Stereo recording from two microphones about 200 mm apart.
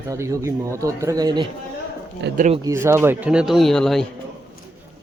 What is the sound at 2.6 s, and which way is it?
Speech, 15° right (ahead or behind).